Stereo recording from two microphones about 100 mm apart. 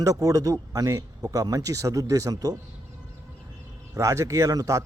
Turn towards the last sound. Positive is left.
turn(degrees=-35)  # may be behind; listen again after turning